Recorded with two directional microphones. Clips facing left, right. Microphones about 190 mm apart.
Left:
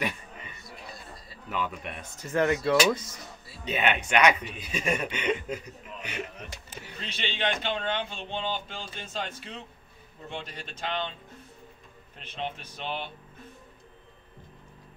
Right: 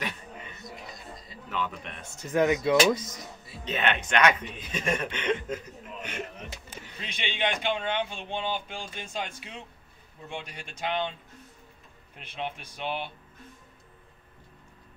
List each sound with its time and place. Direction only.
0.7 s a sound: 20° right (ahead or behind)
1.5 s speech: 10° left (ahead or behind)
2.5 s speech: 15° right (ahead or behind)
3.6 s speech: 10° left (ahead or behind)
7.0 s speech: 10° right (ahead or behind)
12.2 s speech: 10° right (ahead or behind)